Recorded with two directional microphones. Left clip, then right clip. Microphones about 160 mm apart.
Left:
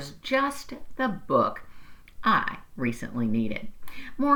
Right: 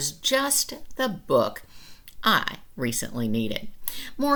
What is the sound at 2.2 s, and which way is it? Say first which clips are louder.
Speech: right 1 dB; 25° right (ahead or behind).